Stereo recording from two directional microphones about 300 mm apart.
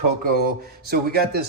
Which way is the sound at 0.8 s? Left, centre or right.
Right.